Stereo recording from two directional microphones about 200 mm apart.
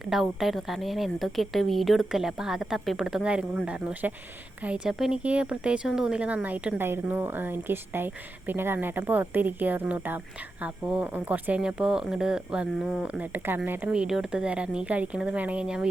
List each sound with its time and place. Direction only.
0.0 s speech: centre (ahead or behind)